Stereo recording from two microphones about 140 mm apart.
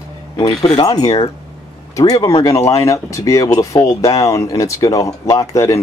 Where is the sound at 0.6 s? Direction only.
35° left (ahead or behind).